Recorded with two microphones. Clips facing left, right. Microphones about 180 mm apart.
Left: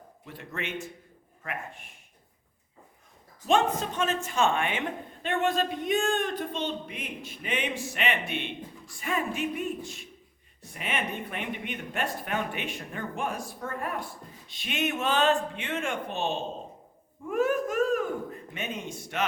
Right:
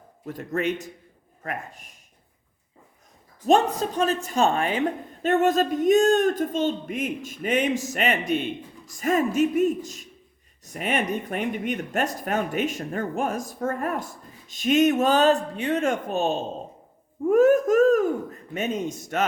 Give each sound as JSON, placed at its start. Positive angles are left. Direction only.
{"t": 0.3, "sound": "speech", "side_deg": -40}
{"t": 3.4, "sound": "speech", "side_deg": -40}
{"t": 17.2, "sound": "a sound", "side_deg": -45}
{"t": 18.5, "sound": "speech", "side_deg": -45}